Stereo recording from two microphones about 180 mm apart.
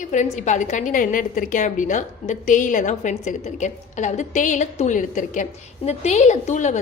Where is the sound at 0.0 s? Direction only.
45° left (ahead or behind).